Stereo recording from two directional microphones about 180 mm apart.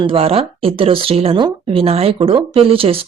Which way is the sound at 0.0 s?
30° right (ahead or behind).